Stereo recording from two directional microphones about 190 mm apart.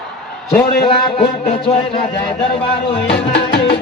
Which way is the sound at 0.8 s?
30° left (ahead or behind).